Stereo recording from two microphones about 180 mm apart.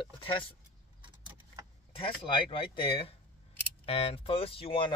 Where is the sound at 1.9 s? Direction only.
30° left (ahead or behind).